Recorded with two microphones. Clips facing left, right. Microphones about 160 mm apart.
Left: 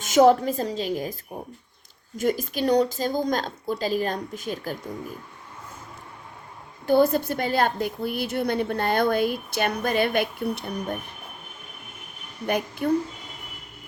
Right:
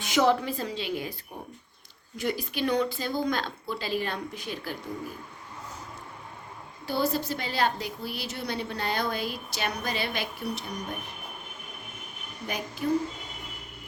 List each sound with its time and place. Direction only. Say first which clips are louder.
0.0 s a woman's voice: left 7 dB; 45° left (ahead or behind)
2.1 s speech: left 5 dB; 45° left (ahead or behind)
6.8 s a woman's voice: left 8 dB; 50° left (ahead or behind)
12.5 s a woman's voice: left 7 dB; 60° left (ahead or behind)